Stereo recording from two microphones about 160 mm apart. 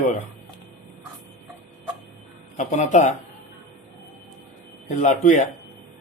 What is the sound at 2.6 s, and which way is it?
Speech, 50° left (ahead or behind).